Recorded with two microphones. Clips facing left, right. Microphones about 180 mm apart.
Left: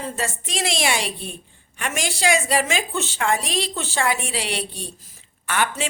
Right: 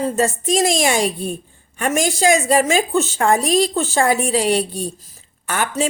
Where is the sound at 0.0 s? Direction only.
45° right (ahead or behind).